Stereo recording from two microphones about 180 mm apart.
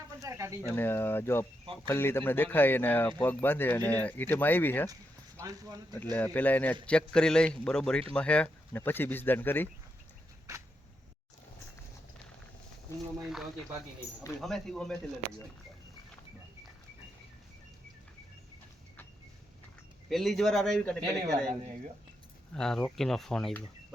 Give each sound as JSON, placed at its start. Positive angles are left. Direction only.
{"t": 0.2, "sound": "bird", "side_deg": -15}
{"t": 0.7, "sound": "speech", "side_deg": 10}
{"t": 5.4, "sound": "speech", "side_deg": -20}
{"t": 6.1, "sound": "a man's voice", "side_deg": 10}
{"t": 13.2, "sound": "a man's voice", "side_deg": 0}
{"t": 20.1, "sound": "a man's voice", "side_deg": 0}
{"t": 22.5, "sound": "a man's voice", "side_deg": 5}